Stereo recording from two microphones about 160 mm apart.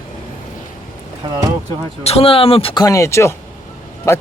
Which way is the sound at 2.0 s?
35° left (ahead or behind).